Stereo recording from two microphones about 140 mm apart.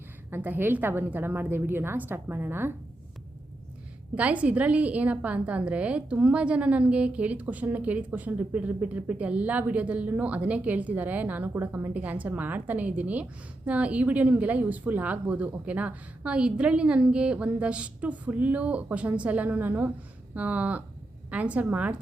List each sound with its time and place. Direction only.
0.3 s a woman's voice: 15° right (ahead or behind)
4.1 s a woman's voice: 10° right (ahead or behind)